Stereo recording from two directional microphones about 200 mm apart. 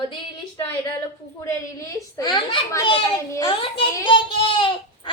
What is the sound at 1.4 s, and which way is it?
A child's voice, 15° left (ahead or behind).